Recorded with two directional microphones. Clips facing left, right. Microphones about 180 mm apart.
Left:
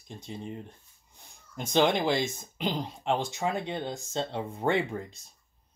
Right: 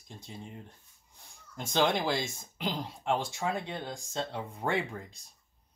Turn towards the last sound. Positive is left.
turn(degrees=25)  # may be behind; listen again after turning